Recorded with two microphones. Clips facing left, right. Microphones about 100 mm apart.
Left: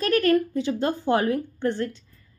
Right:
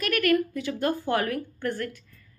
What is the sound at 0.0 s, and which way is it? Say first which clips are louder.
A woman's voice: left 3 dB; 30° left (ahead or behind).